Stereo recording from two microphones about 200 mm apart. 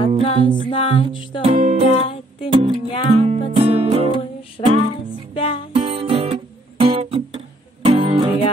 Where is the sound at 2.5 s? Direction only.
25° right (ahead or behind).